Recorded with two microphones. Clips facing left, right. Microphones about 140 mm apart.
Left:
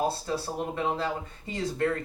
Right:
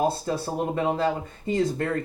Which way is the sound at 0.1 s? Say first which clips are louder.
Right 3 dB; 50° right (ahead or behind).